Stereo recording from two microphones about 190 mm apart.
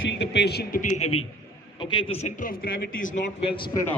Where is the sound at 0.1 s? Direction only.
65° left (ahead or behind); by 3.2 s 50° left (ahead or behind).